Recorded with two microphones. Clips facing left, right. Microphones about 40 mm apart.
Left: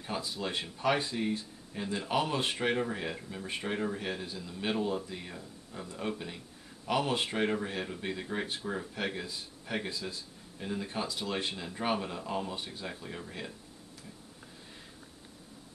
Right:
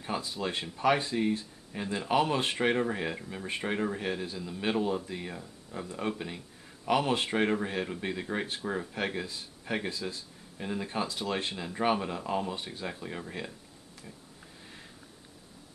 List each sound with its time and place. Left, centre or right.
0.0 s speech: centre